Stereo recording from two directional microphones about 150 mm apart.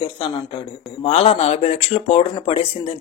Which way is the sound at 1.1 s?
45° left (ahead or behind).